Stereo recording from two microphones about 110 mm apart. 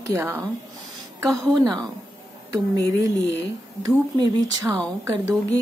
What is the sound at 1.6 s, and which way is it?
Speech, 40° right (ahead or behind).